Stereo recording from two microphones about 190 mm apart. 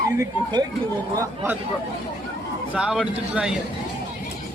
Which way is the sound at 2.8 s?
5° right (ahead or behind).